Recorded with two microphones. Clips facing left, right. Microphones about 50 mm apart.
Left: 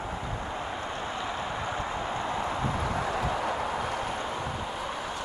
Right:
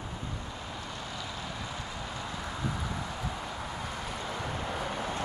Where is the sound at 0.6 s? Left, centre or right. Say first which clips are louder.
Left 7 dB; left.